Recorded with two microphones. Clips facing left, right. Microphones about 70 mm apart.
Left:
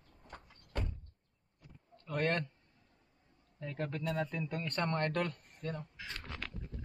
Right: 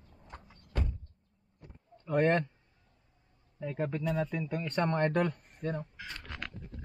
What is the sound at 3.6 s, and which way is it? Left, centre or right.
Speech, centre.